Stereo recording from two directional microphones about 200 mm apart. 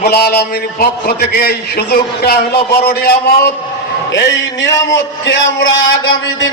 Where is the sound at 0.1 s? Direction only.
50° left (ahead or behind).